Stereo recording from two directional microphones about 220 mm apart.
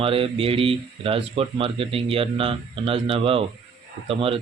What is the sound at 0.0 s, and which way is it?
Speech, 25° right (ahead or behind).